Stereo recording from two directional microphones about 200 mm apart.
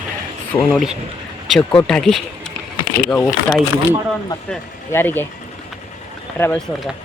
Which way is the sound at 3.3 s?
20° left (ahead or behind).